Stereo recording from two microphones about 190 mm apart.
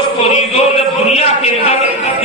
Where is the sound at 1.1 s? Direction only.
35° left (ahead or behind).